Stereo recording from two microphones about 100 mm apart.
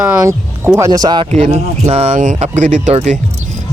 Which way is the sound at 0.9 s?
45° right (ahead or behind).